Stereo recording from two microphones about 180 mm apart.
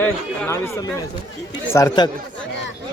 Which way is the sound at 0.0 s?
15° left (ahead or behind).